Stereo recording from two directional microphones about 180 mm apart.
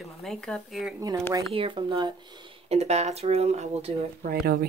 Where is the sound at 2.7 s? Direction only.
35° right (ahead or behind).